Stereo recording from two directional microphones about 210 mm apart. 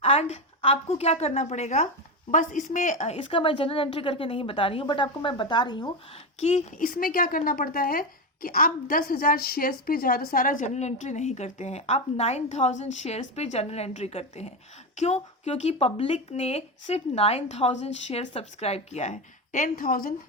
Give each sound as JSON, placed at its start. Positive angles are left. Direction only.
{"t": 0.0, "sound": "a woman's voice", "side_deg": 30}
{"t": 3.2, "sound": "a woman's voice", "side_deg": 25}
{"t": 6.4, "sound": "a woman's voice", "side_deg": 30}